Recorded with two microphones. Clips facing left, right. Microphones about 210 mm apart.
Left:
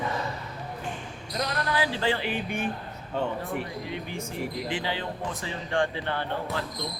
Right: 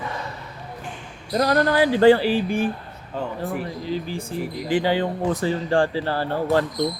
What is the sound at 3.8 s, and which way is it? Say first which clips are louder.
Speech: right 6 dB; 30° right (ahead or behind).